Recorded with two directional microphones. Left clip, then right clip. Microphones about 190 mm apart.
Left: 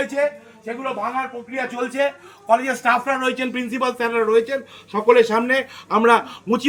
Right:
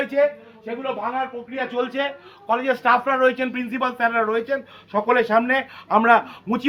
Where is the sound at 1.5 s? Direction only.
15° left (ahead or behind).